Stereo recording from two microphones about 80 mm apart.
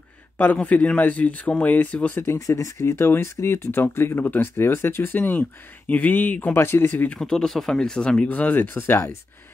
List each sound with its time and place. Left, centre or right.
0.4 s speech: left
2.2 s speech: left
7.2 s speech: centre; by 9.0 s left